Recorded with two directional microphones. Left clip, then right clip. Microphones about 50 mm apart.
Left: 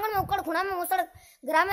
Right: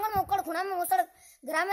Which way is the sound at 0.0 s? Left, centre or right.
Centre.